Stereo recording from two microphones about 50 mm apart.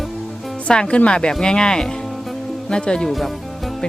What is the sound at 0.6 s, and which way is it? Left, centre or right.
Speech, centre.